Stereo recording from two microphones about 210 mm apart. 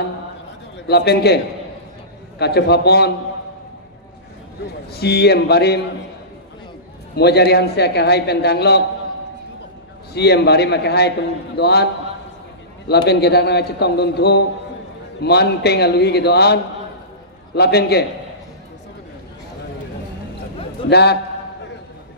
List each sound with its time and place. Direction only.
0.8 s a man's voice: 50° left (ahead or behind)
4.9 s a man's voice: 50° left (ahead or behind)
7.2 s a man's voice: 50° left (ahead or behind)
10.1 s a man's voice: 50° left (ahead or behind)
17.6 s a man's voice: 50° left (ahead or behind)
20.9 s a man's voice: 50° left (ahead or behind)